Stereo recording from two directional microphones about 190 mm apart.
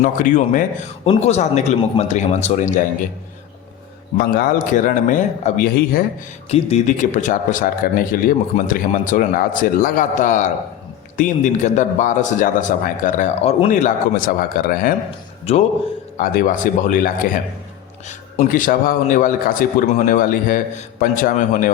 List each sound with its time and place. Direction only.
0.0 s a man's voice: 45° left (ahead or behind)
4.2 s speech: 50° left (ahead or behind)
15.5 s a man's voice: 35° left (ahead or behind)